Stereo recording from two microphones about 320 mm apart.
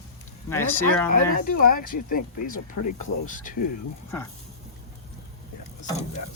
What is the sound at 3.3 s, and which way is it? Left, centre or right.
Speech, left.